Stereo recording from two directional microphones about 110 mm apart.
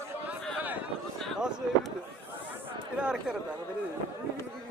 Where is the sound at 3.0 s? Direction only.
10° right (ahead or behind).